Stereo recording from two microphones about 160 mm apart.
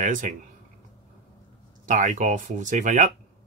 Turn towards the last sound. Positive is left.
turn(degrees=-50)  # may be behind; listen again after turning